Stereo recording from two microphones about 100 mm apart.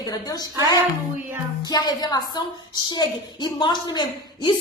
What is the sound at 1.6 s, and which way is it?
A woman's voice, 40° left (ahead or behind).